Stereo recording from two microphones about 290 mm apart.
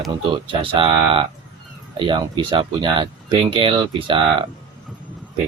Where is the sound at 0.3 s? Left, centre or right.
Centre.